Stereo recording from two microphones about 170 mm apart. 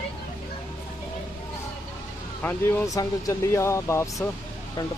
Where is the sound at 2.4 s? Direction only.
10° left (ahead or behind).